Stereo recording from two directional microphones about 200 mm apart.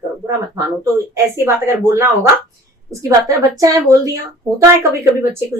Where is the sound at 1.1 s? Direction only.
10° right (ahead or behind).